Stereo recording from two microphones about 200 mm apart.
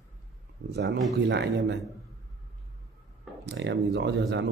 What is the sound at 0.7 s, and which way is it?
Speech, 55° right (ahead or behind).